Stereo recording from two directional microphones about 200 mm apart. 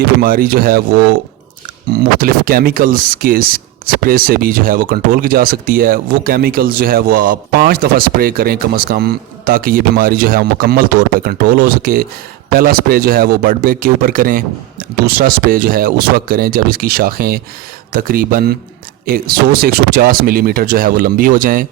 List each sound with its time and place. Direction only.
0.2 s speech: 45° right (ahead or behind)
1.9 s speech: 45° right (ahead or behind)
19.6 s speech: 45° right (ahead or behind)